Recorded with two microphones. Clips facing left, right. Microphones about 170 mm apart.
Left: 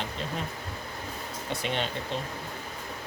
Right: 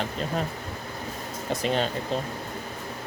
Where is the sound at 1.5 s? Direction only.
40° right (ahead or behind).